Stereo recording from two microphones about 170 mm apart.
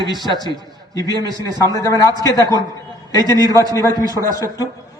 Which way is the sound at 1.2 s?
20° right (ahead or behind).